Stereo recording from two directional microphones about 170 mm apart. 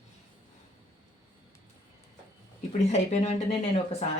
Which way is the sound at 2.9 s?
40° left (ahead or behind).